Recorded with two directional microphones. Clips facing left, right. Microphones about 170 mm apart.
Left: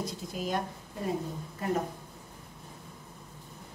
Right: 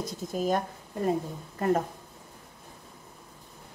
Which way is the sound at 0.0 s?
45° right (ahead or behind).